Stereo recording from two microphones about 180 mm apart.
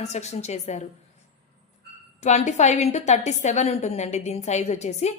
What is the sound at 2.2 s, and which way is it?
A woman's voice, 40° left (ahead or behind).